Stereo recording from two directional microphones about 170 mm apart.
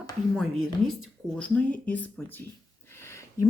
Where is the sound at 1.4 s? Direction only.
10° left (ahead or behind).